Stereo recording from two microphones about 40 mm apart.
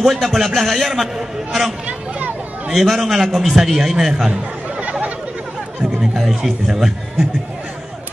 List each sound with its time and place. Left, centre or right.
0.1 s a man's voice: centre
1.9 s a sound: right
2.7 s a man's voice: centre
4.3 s chatter: right
6.1 s a man's voice: centre